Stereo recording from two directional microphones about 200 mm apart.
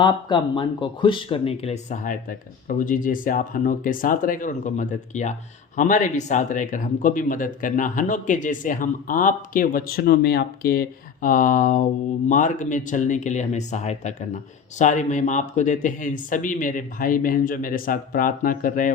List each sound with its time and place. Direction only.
0.0 s speech: 25° left (ahead or behind); by 18.9 s 40° left (ahead or behind)